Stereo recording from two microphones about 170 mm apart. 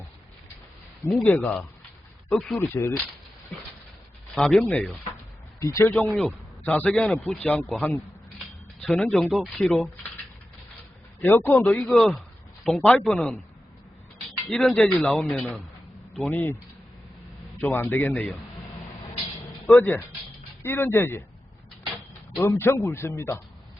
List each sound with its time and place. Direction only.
1.0 s a man's voice: 15° left (ahead or behind)
2.6 s a man's voice: 15° left (ahead or behind)
4.4 s a man's voice: 5° left (ahead or behind)
11.2 s a man's voice: 10° left (ahead or behind)
11.9 s speech: centre (ahead or behind)
14.4 s a man's voice: 5° left (ahead or behind)
17.6 s a man's voice: 10° left (ahead or behind)
19.7 s a man's voice: 10° left (ahead or behind)
22.4 s a man's voice: 15° left (ahead or behind)